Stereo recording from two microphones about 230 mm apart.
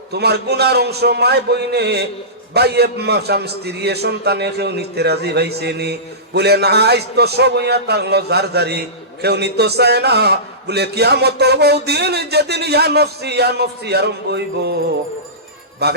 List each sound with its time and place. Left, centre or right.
0.1 s a man's voice: right
15.8 s a man's voice: right